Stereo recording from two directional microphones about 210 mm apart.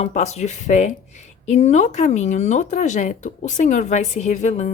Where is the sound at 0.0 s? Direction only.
30° left (ahead or behind).